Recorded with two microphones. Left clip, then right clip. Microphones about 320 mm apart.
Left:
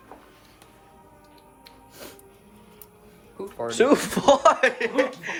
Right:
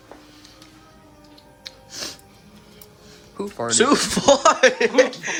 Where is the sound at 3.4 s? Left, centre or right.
Right.